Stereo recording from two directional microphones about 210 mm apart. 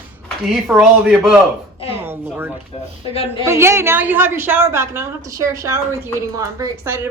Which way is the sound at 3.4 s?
15° right (ahead or behind).